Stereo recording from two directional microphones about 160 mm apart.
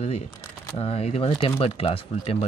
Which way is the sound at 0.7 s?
40° left (ahead or behind).